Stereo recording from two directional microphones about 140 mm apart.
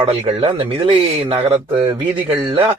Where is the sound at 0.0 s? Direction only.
45° right (ahead or behind).